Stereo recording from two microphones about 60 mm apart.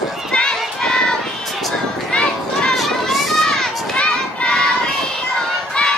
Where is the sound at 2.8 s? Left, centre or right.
Centre.